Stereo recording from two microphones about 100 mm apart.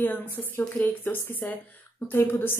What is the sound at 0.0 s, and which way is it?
A woman's voice, 15° left (ahead or behind).